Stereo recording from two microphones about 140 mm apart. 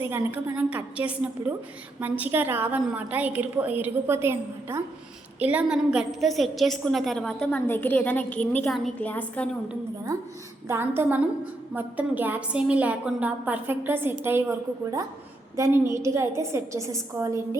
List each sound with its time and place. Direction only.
0.0 s a woman's voice: 15° right (ahead or behind); by 9.5 s 10° left (ahead or behind)
10.7 s a woman's voice: 15° right (ahead or behind)
15.5 s a woman's voice: 20° right (ahead or behind)